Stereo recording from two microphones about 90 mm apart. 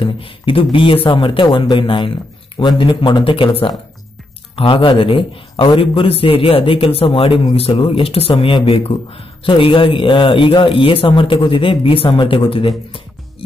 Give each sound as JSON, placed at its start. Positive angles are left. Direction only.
{"t": 0.0, "sound": "speech", "side_deg": 75}